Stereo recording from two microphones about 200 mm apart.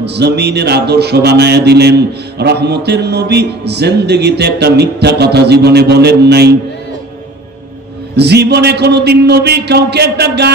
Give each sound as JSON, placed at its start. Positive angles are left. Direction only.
{"t": 0.0, "sound": "speech", "side_deg": -55}
{"t": 8.2, "sound": "speech", "side_deg": -55}